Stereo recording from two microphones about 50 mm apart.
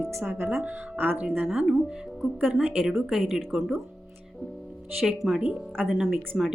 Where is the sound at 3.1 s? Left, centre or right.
Centre.